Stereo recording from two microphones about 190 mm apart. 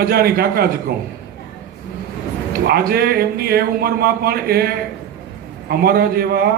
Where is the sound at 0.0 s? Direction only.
55° right (ahead or behind).